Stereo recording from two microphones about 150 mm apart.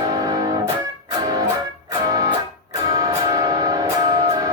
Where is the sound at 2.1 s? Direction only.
25° right (ahead or behind).